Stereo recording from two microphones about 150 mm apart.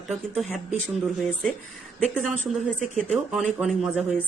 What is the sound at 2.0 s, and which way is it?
Speech, centre (ahead or behind).